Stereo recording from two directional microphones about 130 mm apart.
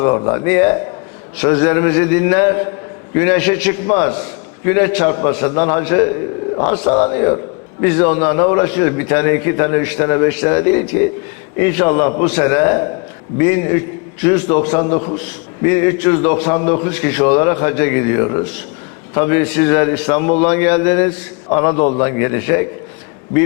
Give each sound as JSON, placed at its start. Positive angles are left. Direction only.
{"t": 0.0, "sound": "a man's voice", "side_deg": 25}